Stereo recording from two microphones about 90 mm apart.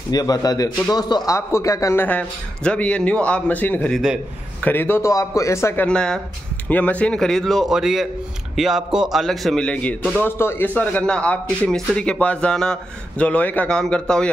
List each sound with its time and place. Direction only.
0.1 s a man's voice: 45° left (ahead or behind)
1.3 s a man's voice: 35° left (ahead or behind)
2.0 s a man's voice: 15° left (ahead or behind)
5.1 s a man's voice: 35° left (ahead or behind)
5.8 s a man's voice: 10° left (ahead or behind)
9.7 s a man's voice: 10° left (ahead or behind)